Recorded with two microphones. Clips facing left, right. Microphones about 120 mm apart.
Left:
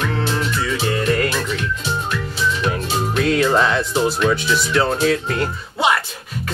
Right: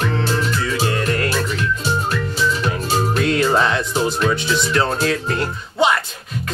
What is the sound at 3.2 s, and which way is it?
Speech, centre (ahead or behind).